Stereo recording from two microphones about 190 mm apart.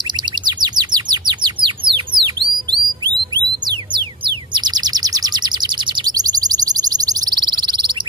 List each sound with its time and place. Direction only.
0.5 s bird: 20° right (ahead or behind)
4.6 s bird: 20° right (ahead or behind)